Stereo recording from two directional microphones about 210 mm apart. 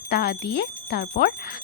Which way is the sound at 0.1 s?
50° left (ahead or behind).